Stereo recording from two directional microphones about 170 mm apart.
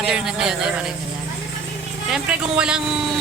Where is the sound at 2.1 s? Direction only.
5° right (ahead or behind).